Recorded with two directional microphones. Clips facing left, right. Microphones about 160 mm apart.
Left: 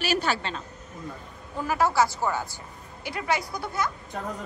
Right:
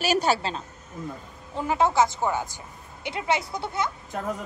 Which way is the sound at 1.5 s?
20° right (ahead or behind).